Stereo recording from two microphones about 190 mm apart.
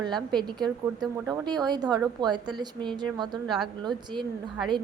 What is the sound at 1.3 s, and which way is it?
A woman's voice, 20° right (ahead or behind).